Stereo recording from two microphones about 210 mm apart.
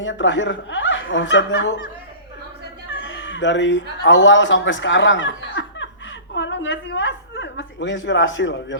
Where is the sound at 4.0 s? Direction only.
60° left (ahead or behind).